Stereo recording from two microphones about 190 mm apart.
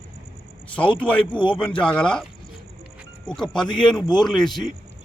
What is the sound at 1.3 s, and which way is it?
Speech, 25° left (ahead or behind).